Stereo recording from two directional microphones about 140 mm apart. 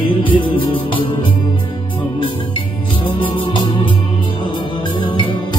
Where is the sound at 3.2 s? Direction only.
35° left (ahead or behind).